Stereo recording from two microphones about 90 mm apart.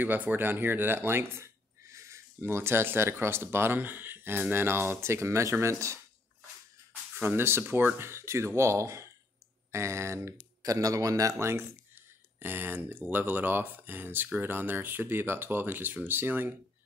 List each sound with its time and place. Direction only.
0.0 s speech: 20° right (ahead or behind)
7.2 s speech: 25° right (ahead or behind)